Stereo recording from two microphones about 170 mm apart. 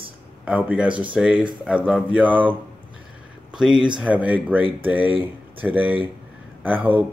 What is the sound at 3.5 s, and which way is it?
Speech, 5° right (ahead or behind).